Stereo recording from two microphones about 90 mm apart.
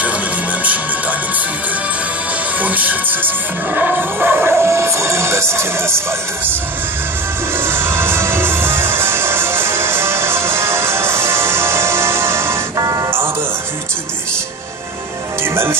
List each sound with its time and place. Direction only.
2.6 s music: 20° right (ahead or behind)
7.5 s music: 25° right (ahead or behind)
15.4 s music: 25° right (ahead or behind)